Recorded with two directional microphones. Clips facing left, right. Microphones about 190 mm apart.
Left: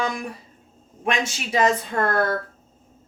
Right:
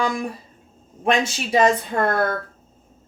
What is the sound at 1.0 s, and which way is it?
Speech, 30° right (ahead or behind).